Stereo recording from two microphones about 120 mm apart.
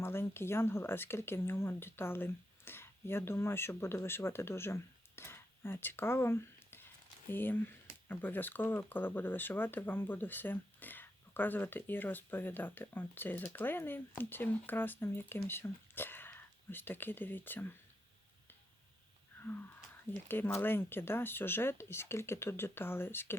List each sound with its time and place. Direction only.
0.0 s speech: 20° left (ahead or behind)
20.2 s speech: 15° left (ahead or behind)